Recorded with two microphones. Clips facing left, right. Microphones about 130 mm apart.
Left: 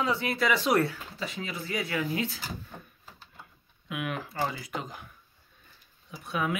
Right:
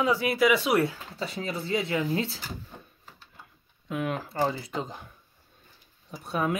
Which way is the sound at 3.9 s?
30° right (ahead or behind).